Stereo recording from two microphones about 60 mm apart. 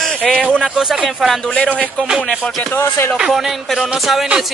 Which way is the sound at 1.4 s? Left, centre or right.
Centre.